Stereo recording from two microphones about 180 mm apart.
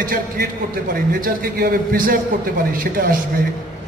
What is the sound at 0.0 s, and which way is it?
A man's voice, 50° right (ahead or behind).